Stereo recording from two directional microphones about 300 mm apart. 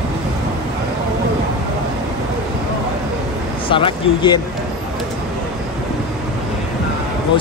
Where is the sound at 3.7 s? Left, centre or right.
Centre.